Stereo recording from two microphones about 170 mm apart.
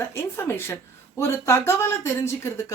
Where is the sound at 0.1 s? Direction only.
15° left (ahead or behind).